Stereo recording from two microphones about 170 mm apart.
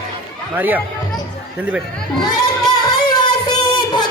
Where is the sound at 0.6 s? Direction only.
10° right (ahead or behind).